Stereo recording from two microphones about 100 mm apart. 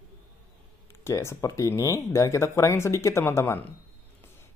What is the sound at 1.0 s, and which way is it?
Speech, 30° left (ahead or behind).